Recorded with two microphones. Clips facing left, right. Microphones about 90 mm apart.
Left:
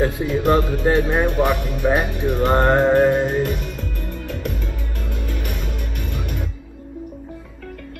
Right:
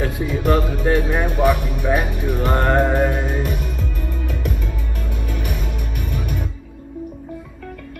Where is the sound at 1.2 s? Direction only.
15° right (ahead or behind).